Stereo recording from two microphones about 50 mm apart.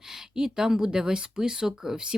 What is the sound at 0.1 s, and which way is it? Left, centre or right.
Speech, centre.